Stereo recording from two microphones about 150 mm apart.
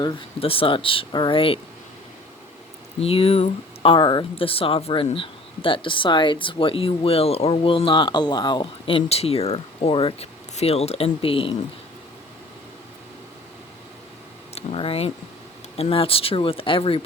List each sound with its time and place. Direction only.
0.0 s speech: 35° left (ahead or behind)
3.0 s speech: 40° left (ahead or behind)
3.9 s speech: 30° left (ahead or behind)
14.5 s speech: 40° left (ahead or behind)